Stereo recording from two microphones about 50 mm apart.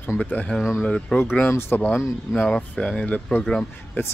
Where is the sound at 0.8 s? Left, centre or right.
Left.